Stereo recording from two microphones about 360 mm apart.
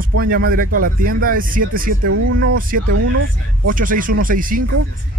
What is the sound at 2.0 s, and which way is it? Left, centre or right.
Speech, right.